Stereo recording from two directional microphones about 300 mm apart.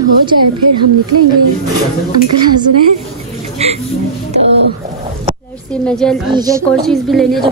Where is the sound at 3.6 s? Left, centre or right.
Right.